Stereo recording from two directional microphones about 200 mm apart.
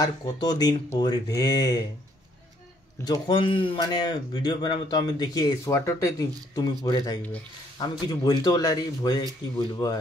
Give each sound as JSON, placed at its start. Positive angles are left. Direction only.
{"t": 0.0, "sound": "speech", "side_deg": 20}
{"t": 3.1, "sound": "speech", "side_deg": 25}